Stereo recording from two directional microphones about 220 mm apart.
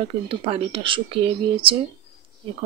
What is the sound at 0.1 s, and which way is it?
Speech, 25° right (ahead or behind).